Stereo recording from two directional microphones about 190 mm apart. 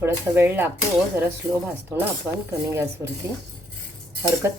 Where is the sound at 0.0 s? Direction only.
10° right (ahead or behind).